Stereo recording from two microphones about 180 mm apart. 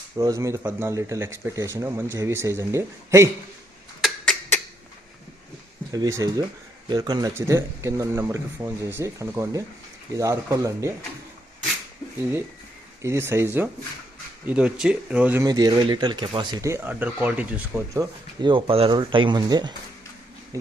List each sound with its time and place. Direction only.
0.2 s speech: 15° right (ahead or behind)
4.0 s a sound: centre (ahead or behind)
5.9 s speech: 20° right (ahead or behind)
13.0 s speech: 15° right (ahead or behind)
15.4 s speech: 20° right (ahead or behind)
18.3 s speech: 25° right (ahead or behind)